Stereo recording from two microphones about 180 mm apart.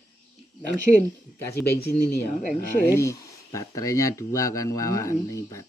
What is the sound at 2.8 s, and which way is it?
Speech, 15° left (ahead or behind).